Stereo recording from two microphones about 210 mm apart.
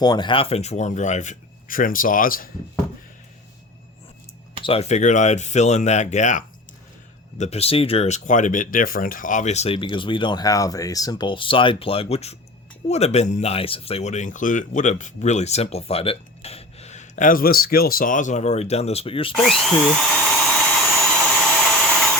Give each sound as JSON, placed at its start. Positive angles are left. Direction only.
{"t": 0.0, "sound": "speech", "side_deg": 20}
{"t": 4.6, "sound": "speech", "side_deg": 30}
{"t": 19.3, "sound": "drill", "side_deg": 0}